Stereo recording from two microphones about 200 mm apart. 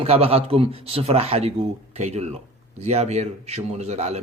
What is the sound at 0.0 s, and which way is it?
A man's voice, 30° right (ahead or behind).